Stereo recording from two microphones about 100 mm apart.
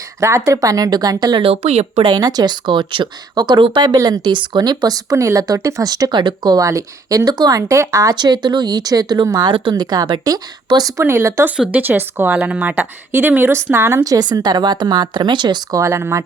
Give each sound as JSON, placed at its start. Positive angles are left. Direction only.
{"t": 0.2, "sound": "speech", "side_deg": -30}
{"t": 1.4, "sound": "speech", "side_deg": -80}
{"t": 2.0, "sound": "speech", "side_deg": -40}
{"t": 11.0, "sound": "a woman's voice", "side_deg": -25}
{"t": 11.5, "sound": "speech", "side_deg": -10}
{"t": 11.8, "sound": "a woman's voice", "side_deg": -20}
{"t": 14.0, "sound": "speech", "side_deg": -40}
{"t": 15.8, "sound": "a woman's voice", "side_deg": -30}